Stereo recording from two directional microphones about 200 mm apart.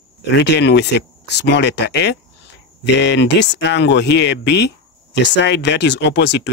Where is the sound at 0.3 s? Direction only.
60° left (ahead or behind).